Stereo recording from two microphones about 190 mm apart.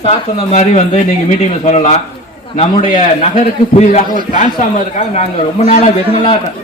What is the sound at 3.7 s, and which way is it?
Speech, 35° left (ahead or behind).